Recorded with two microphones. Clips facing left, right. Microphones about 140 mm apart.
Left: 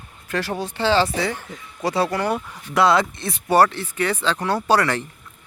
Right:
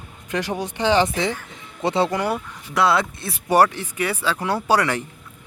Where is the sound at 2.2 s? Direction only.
Centre (ahead or behind).